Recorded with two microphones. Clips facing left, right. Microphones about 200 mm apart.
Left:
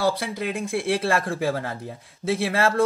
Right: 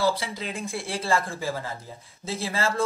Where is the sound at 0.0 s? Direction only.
60° left (ahead or behind).